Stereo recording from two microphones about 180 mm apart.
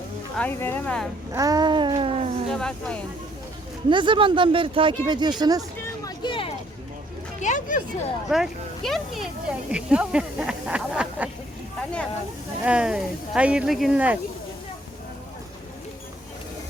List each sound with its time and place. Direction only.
0.3 s speech: 10° left (ahead or behind)
1.3 s speech: 20° right (ahead or behind)
2.5 s speech: 5° left (ahead or behind)
3.8 s speech: 25° right (ahead or behind)
5.8 s a sound: 25° left (ahead or behind)
7.4 s speech: 45° left (ahead or behind)
8.3 s speech: centre (ahead or behind)
12.6 s speech: 5° right (ahead or behind)